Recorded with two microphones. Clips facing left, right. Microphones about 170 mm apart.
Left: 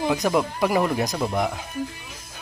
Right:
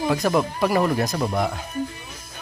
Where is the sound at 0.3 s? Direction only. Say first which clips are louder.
Right 1 dB; 10° left (ahead or behind).